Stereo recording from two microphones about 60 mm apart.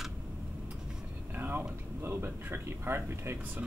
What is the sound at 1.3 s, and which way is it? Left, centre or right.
Vehicle, right.